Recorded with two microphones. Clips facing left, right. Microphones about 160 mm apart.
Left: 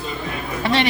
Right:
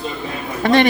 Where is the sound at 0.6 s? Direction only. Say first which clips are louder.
Right 6 dB; 50° right (ahead or behind).